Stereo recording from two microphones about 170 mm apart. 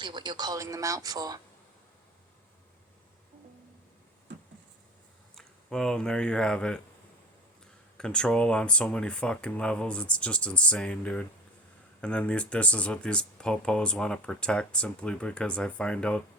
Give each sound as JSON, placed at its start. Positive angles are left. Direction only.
{"t": 0.0, "sound": "speech", "side_deg": -25}
{"t": 5.3, "sound": "speech", "side_deg": 5}
{"t": 7.9, "sound": "speech", "side_deg": 5}